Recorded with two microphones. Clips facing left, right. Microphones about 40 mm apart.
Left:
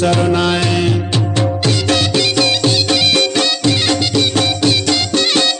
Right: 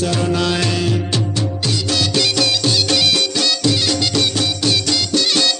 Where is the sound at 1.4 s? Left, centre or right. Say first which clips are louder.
Left 5 dB; left.